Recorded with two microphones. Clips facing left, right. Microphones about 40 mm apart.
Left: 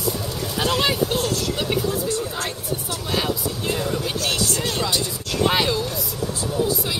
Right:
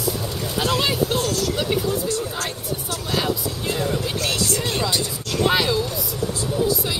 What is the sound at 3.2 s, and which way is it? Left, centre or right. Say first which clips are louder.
Speech: even; centre.